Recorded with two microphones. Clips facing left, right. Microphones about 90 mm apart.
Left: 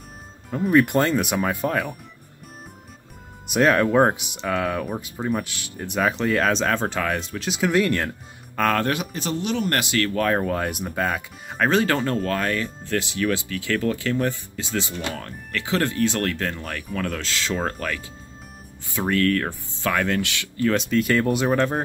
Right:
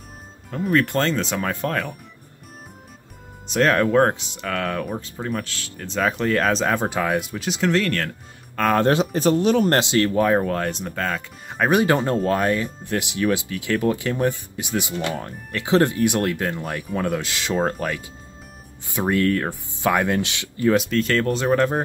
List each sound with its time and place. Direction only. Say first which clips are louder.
0.5 s speech: left 2 dB; 10° left (ahead or behind)
3.4 s speech: even; 15° left (ahead or behind)
6.2 s speech: right 2 dB; centre (ahead or behind)
6.6 s speech: right 1 dB; 10° right (ahead or behind)
7.4 s speech: left 2 dB; 5° left (ahead or behind)
8.7 s speech: right 6 dB; 25° right (ahead or behind)
9.1 s speech: right 8 dB; 40° right (ahead or behind)
9.7 s speech: right 4 dB; 25° right (ahead or behind)
10.4 s speech: right 1 dB; 5° left (ahead or behind)
11.5 s speech: right 2 dB; 15° right (ahead or behind)
20.9 s speech: left 1 dB; 15° left (ahead or behind)
21.5 s speech: right 2 dB; 10° right (ahead or behind)